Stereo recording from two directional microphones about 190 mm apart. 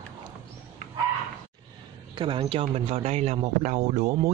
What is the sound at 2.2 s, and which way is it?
A man's voice, 25° right (ahead or behind).